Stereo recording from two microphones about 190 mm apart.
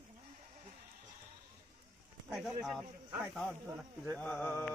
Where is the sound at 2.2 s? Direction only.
Centre (ahead or behind).